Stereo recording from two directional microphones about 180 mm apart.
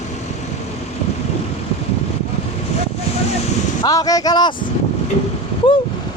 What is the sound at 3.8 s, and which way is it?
Speech, 20° left (ahead or behind).